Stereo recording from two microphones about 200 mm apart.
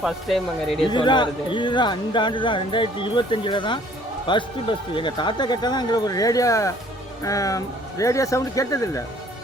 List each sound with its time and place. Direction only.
0.0 s speech: centre (ahead or behind)
0.9 s speech: 25° left (ahead or behind)